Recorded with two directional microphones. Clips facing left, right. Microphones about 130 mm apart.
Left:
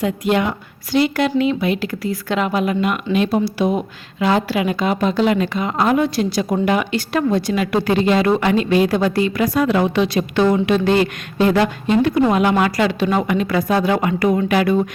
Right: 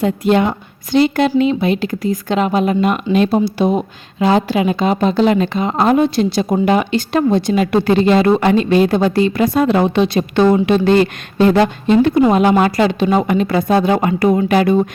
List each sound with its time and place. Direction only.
0.0 s a woman's voice: 30° right (ahead or behind)
2.8 s a woman's voice: 35° right (ahead or behind)